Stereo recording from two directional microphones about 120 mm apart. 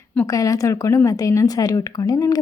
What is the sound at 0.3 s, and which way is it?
A woman's voice, 30° left (ahead or behind).